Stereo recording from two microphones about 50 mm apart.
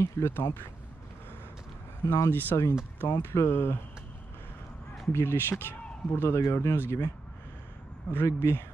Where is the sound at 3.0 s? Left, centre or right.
Left.